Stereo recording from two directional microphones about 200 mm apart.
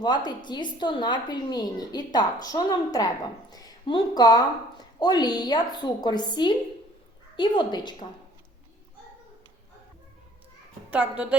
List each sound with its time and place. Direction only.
0.0 s a woman's voice: 20° left (ahead or behind)
10.9 s speech: 5° right (ahead or behind)